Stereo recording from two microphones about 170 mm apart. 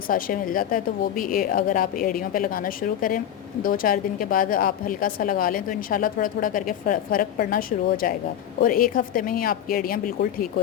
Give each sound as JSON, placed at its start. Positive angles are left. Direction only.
{"t": 0.1, "sound": "a woman's voice", "side_deg": 55}